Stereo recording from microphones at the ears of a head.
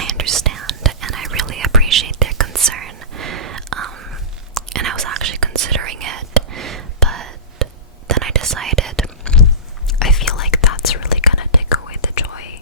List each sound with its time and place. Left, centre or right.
0.0 s whispering: right
10.1 s whispering: left